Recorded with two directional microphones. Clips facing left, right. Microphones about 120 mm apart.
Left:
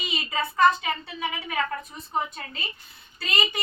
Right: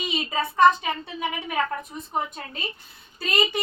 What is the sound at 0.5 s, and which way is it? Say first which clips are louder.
A woman's voice: right 3 dB; 25° right (ahead or behind).